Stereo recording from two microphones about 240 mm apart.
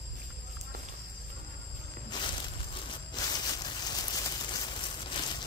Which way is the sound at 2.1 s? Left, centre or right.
Centre.